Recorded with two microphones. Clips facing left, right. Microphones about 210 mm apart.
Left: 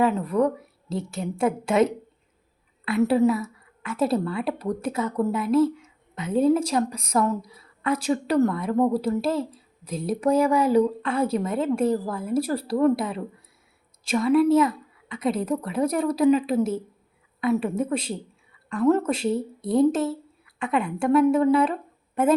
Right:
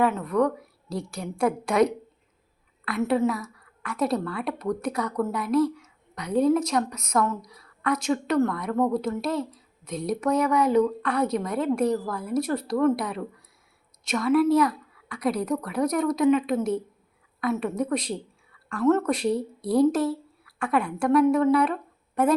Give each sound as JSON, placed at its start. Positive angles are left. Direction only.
{"t": 0.0, "sound": "a woman's voice", "side_deg": 30}